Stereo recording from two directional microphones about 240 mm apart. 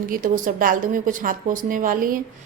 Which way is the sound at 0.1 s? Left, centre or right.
Right.